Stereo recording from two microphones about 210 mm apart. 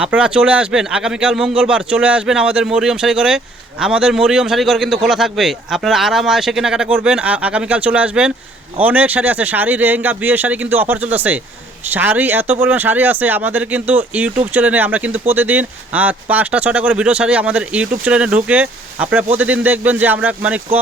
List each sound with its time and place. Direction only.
0.0 s speech: 5° right (ahead or behind)